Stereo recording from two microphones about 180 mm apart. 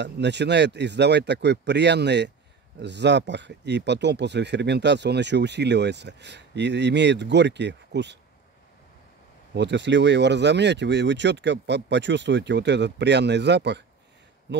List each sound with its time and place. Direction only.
0.0 s speech: 75° right (ahead or behind)
9.5 s speech: 75° right (ahead or behind)